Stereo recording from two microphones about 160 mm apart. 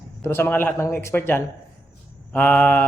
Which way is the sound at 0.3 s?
15° left (ahead or behind).